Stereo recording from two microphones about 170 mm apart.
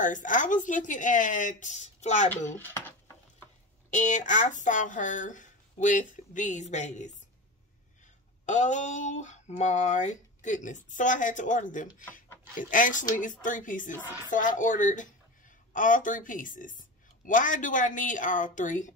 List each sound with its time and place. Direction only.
0.0 s speech: 50° left (ahead or behind)
2.2 s speech: 10° left (ahead or behind)
3.9 s speech: 45° left (ahead or behind)
8.5 s speech: 45° left (ahead or behind)